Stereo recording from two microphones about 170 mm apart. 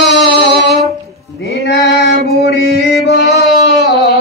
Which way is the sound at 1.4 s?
85° left.